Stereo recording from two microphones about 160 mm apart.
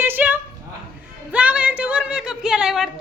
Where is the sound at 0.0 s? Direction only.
10° right (ahead or behind).